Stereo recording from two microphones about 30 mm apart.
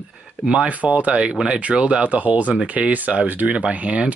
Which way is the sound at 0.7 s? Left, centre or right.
Right.